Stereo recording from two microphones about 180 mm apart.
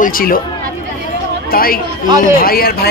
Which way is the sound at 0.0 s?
50° left (ahead or behind).